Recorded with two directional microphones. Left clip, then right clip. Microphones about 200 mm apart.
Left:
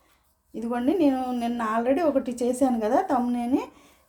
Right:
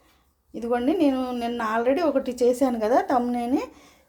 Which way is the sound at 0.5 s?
15° right (ahead or behind).